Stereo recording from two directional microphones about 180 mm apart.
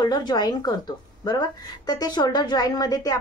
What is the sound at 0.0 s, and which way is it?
A woman's voice, 25° left (ahead or behind).